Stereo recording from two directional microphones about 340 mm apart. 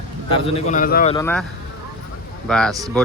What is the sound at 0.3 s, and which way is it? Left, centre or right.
Speech, centre.